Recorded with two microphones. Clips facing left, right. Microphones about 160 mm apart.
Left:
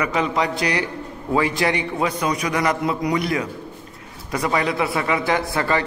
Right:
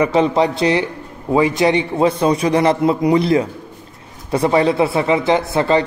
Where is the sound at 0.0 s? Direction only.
30° right (ahead or behind).